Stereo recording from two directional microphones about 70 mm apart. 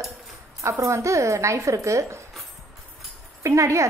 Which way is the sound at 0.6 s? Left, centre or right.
Right.